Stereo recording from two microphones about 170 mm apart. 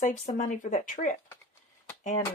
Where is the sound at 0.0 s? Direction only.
45° left (ahead or behind).